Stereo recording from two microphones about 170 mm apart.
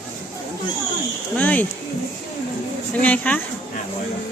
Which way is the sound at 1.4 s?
10° left (ahead or behind).